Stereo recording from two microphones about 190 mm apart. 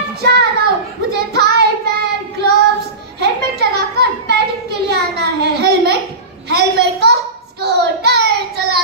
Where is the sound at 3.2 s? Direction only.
60° right (ahead or behind).